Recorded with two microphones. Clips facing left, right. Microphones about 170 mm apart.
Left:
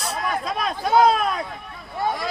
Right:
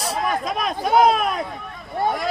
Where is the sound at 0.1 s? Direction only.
15° right (ahead or behind).